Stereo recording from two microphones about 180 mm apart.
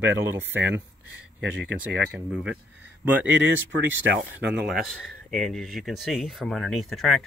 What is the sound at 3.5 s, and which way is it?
Speech, 90° right.